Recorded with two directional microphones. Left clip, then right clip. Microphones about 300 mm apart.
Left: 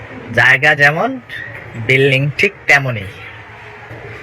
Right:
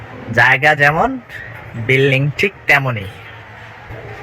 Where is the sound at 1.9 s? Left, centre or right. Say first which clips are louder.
Left 2 dB; centre.